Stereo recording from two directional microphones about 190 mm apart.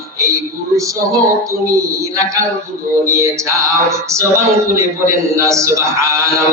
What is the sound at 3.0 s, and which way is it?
Speech, 15° right (ahead or behind).